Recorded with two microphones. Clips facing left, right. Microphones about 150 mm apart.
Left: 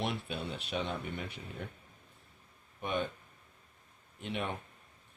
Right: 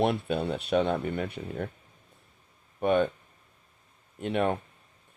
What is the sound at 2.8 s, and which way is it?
Speech, 45° right (ahead or behind).